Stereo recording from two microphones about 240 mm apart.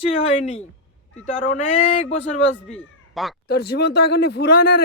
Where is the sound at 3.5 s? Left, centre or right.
Left.